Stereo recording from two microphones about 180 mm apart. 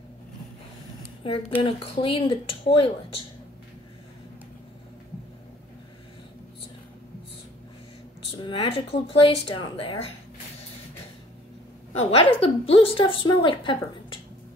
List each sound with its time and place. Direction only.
1.6 s a woman's voice: 30° left (ahead or behind)
8.3 s speech: 30° left (ahead or behind)
11.9 s a woman's voice: 30° left (ahead or behind)